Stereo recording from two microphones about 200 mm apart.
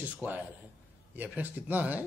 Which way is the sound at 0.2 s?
5° right (ahead or behind).